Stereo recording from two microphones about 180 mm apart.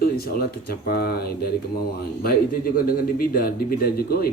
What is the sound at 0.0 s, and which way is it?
Speech, 60° left (ahead or behind).